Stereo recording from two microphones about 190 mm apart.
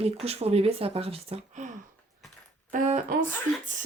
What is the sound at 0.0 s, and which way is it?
Speech, 35° right (ahead or behind).